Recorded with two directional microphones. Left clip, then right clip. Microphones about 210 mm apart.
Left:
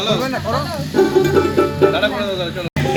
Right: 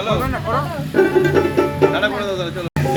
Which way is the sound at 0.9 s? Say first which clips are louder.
Left 1 dB; 45° left (ahead or behind).